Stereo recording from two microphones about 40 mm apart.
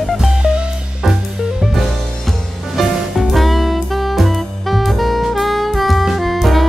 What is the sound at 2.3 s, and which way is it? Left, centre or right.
Music, centre.